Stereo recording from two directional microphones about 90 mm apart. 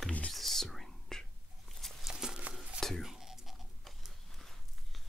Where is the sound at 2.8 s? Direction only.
Centre (ahead or behind).